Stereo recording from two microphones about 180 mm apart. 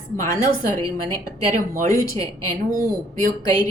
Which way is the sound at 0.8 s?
20° left (ahead or behind).